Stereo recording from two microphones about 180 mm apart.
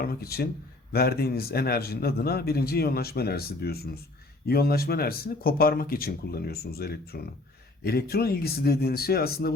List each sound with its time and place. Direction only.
0.0 s a man's voice: 60° left (ahead or behind)